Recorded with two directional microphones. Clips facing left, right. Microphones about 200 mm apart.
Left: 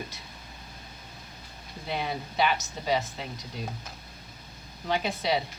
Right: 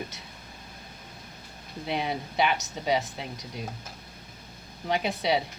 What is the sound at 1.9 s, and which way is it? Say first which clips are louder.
Speech: right 2 dB; 20° right (ahead or behind).